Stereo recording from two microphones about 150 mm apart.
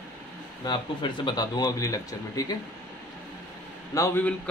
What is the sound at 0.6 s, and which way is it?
Speech, 30° left (ahead or behind).